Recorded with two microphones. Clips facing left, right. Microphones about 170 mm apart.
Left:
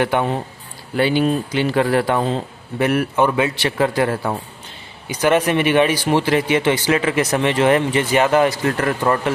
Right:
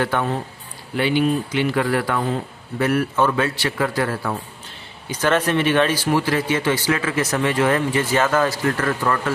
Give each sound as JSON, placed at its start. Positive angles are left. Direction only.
{"t": 0.0, "sound": "speech", "side_deg": 20}
{"t": 0.9, "sound": "speech", "side_deg": 35}
{"t": 5.0, "sound": "speech", "side_deg": 15}